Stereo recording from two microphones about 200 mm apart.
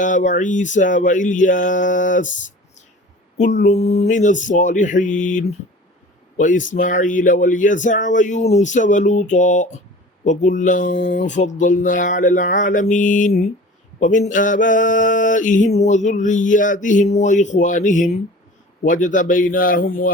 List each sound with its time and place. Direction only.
0.0 s mantra: 40° left (ahead or behind)
3.3 s mantra: 35° left (ahead or behind)
6.3 s speech: 40° left (ahead or behind)
6.7 s mantra: 40° left (ahead or behind)